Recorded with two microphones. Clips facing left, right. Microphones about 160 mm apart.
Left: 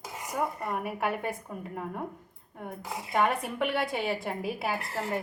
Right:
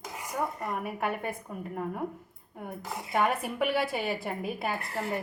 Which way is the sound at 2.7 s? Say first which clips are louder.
Even; 5° right (ahead or behind).